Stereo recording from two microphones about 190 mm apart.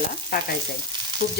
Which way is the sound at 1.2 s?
70° left (ahead or behind).